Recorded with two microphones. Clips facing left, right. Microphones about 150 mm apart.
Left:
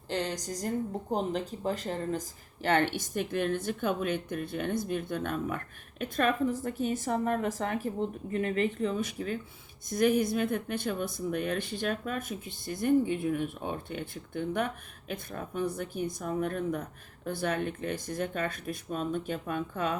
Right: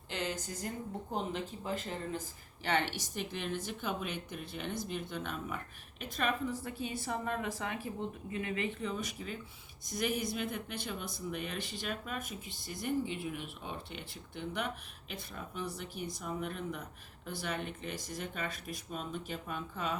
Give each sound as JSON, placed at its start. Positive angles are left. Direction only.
{"t": 0.1, "sound": "speech", "side_deg": 35}